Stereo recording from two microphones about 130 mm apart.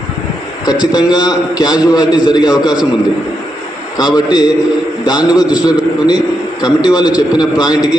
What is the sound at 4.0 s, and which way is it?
A man's voice, 30° left (ahead or behind).